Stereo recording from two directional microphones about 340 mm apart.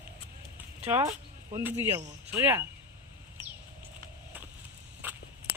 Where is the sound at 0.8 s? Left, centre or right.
Centre.